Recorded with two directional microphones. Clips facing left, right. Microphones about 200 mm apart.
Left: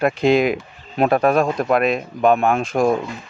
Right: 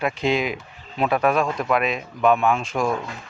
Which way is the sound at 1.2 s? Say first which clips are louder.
Left 4 dB; 35° left (ahead or behind).